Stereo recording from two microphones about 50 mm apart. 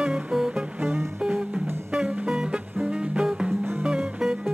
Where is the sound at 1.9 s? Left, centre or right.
Right.